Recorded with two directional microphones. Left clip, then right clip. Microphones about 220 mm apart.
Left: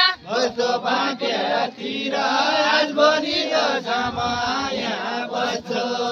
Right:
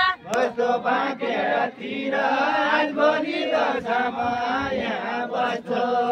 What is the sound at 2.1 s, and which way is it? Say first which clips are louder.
Chant: left 2 dB; 45° left (ahead or behind).